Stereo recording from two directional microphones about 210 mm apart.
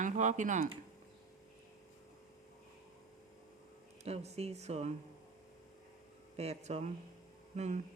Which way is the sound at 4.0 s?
30° right (ahead or behind).